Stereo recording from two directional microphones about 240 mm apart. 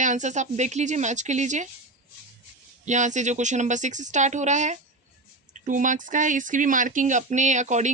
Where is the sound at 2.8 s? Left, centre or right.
Right.